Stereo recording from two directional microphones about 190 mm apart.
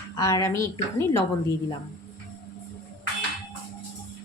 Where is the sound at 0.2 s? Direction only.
15° left (ahead or behind).